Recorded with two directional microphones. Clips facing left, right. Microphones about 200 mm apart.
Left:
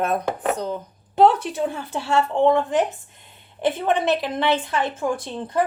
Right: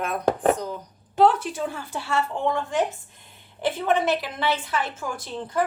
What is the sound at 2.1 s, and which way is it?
Speech, 25° left (ahead or behind).